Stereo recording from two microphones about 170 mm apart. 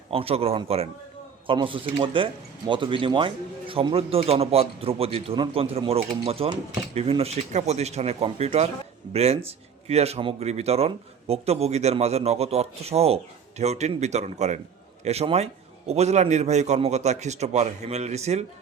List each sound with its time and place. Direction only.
0.1 s speech: 35° right (ahead or behind)